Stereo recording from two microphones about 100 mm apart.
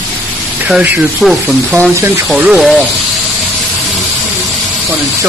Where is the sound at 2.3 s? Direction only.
5° right (ahead or behind).